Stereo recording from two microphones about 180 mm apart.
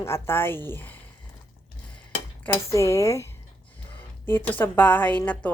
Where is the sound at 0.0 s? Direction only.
15° left (ahead or behind).